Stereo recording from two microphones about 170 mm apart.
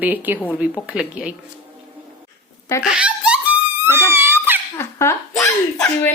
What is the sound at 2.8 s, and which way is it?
Giggle, 5° right (ahead or behind).